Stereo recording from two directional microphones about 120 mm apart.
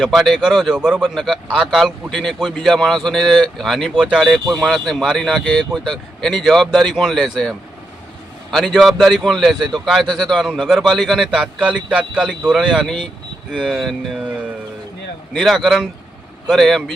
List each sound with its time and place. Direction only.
0.1 s a man's voice: centre (ahead or behind)
15.3 s a man's voice: centre (ahead or behind)